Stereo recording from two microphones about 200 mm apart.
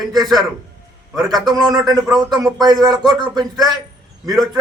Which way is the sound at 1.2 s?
20° right (ahead or behind).